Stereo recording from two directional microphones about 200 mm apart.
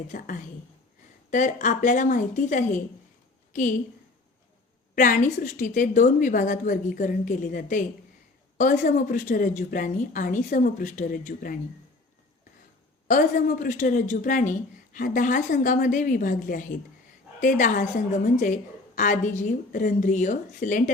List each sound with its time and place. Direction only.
0.1 s a woman's voice: 40° left (ahead or behind)
4.9 s a woman's voice: 40° left (ahead or behind)
13.1 s a woman's voice: 40° left (ahead or behind)